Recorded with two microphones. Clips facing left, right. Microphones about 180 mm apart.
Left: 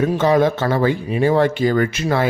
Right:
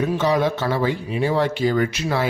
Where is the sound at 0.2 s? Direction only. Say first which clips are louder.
Left 4 dB; 50° left (ahead or behind).